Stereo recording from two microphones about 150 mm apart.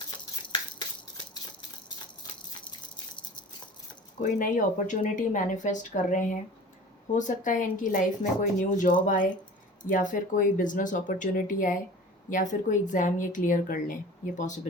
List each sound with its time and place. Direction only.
4.2 s a woman's voice: 60° left (ahead or behind)